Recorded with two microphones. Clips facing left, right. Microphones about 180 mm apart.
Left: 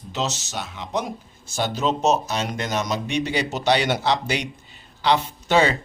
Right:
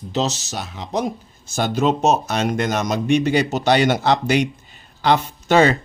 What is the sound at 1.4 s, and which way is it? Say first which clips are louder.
Speech: right 4 dB; 50° right (ahead or behind).